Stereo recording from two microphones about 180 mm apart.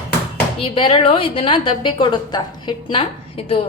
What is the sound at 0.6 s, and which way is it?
A woman's voice, 30° left (ahead or behind).